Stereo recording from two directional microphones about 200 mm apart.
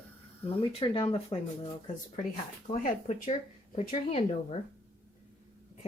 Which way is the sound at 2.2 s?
40° left (ahead or behind).